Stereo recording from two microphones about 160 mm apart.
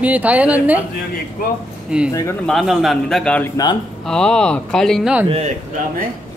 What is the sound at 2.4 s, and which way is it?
Speech, centre (ahead or behind).